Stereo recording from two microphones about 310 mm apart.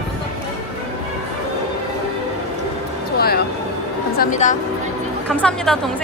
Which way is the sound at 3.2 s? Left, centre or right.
Left.